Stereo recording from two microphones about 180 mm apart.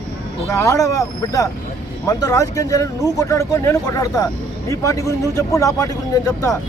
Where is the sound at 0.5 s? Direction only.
15° left (ahead or behind).